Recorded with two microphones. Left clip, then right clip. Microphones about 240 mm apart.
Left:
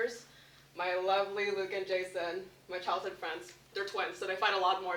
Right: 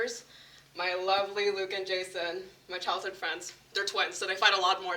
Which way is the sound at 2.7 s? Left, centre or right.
Right.